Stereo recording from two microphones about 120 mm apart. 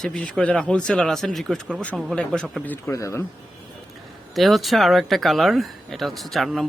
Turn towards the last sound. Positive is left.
turn(degrees=0)  # may be behind; listen again after turning